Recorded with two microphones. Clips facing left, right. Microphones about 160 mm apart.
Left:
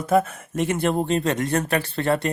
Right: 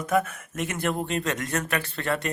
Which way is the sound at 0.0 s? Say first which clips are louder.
Left 5 dB; 30° left (ahead or behind).